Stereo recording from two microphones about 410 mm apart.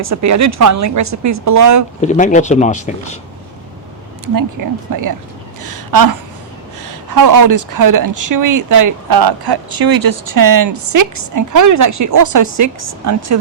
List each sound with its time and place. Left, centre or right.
0.0 s speech: right
2.0 s speech: centre
4.9 s speech: right
5.6 s a sound: right
6.8 s speech: right